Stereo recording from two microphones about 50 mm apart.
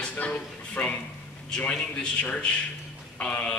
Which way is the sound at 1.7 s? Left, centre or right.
Centre.